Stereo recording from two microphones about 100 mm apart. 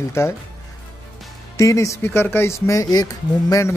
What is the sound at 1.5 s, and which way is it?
Speech, 35° left (ahead or behind).